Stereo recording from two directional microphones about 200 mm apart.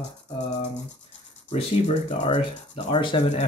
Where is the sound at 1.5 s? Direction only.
30° left (ahead or behind).